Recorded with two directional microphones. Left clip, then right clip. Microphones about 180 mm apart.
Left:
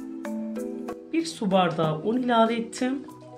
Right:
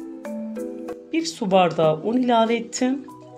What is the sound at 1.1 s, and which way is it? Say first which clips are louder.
Speech: right 5 dB; 35° right (ahead or behind).